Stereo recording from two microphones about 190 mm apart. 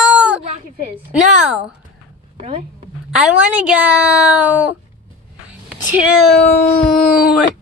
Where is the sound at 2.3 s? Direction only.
35° right (ahead or behind).